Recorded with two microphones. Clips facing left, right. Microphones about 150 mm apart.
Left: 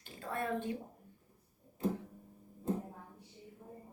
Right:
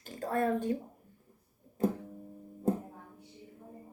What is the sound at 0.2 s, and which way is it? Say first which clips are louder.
Speech: right 7 dB; 40° right (ahead or behind).